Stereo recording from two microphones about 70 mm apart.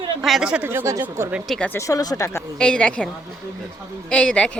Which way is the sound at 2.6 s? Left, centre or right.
Centre.